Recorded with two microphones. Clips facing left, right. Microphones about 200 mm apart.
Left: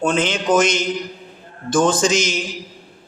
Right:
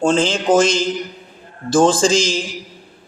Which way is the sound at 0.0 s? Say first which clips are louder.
Right 3 dB; 30° right (ahead or behind).